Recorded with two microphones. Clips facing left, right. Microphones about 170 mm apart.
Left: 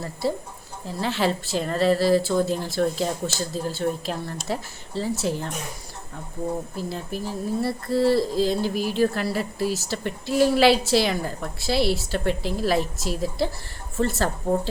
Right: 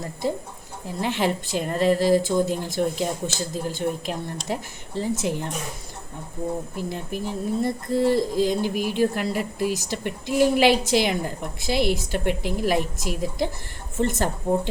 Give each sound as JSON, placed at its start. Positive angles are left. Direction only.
{"t": 0.0, "sound": "a woman's voice", "side_deg": -15}
{"t": 6.7, "sound": "a woman's voice", "side_deg": -15}